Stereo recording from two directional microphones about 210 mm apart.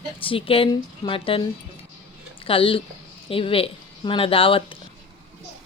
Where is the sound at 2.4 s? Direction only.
25° left (ahead or behind).